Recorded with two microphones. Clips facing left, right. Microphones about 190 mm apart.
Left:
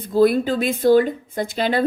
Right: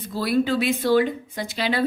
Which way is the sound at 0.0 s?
50° left (ahead or behind).